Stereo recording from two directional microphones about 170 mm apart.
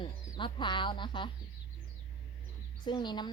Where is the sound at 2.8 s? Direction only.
25° left (ahead or behind).